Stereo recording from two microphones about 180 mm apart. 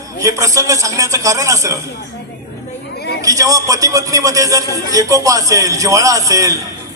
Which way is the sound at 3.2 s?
20° right (ahead or behind).